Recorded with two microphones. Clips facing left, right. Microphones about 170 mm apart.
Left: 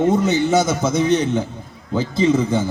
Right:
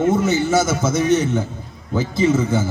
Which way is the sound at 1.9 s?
10° right (ahead or behind).